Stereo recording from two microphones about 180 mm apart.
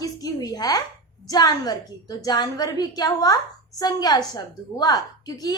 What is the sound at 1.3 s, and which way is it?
A woman's voice, 20° left (ahead or behind).